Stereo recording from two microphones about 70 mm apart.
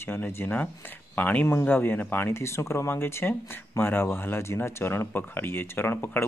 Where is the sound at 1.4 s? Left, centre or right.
Left.